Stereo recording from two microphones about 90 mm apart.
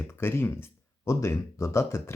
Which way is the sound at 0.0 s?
25° left (ahead or behind).